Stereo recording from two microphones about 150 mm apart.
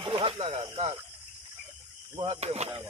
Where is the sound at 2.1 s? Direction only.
35° right (ahead or behind).